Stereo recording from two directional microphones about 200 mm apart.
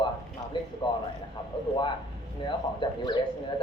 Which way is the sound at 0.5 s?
20° left (ahead or behind).